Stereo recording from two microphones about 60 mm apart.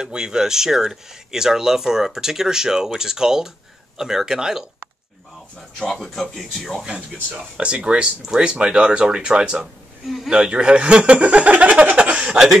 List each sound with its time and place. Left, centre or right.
0.0 s speech: centre
5.8 s speech: centre
7.5 s speech: centre
10.0 s speech: centre
10.3 s speech: centre